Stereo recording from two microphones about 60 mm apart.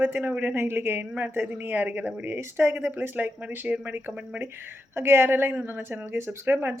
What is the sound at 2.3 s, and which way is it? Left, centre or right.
Speech, right.